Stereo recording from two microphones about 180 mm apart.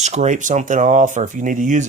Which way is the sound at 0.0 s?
40° right (ahead or behind).